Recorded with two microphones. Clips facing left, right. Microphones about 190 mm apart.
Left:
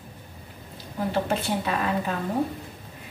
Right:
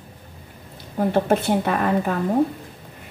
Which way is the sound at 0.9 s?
50° right (ahead or behind).